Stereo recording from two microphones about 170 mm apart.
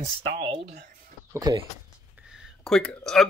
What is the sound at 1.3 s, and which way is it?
Speech, 25° right (ahead or behind).